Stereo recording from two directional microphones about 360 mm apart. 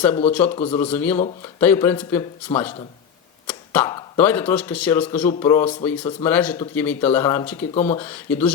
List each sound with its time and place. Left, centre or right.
0.3 s speech: centre
7.7 s speech: centre
7.9 s speech: centre